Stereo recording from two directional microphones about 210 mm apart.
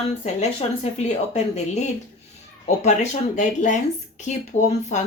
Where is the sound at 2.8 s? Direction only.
35° left (ahead or behind).